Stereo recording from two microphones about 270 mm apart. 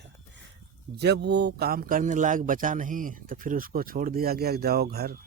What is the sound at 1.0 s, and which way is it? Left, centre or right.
A man's voice, right.